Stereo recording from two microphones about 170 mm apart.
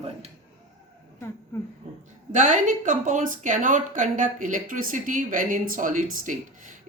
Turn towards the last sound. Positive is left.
turn(degrees=-50)  # may be behind; listen again after turning